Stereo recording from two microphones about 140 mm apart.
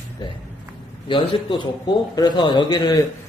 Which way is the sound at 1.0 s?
35° left (ahead or behind).